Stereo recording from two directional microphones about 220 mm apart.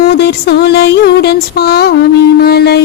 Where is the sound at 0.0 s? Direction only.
45° left (ahead or behind).